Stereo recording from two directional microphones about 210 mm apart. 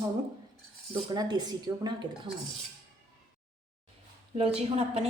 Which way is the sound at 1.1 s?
20° right (ahead or behind).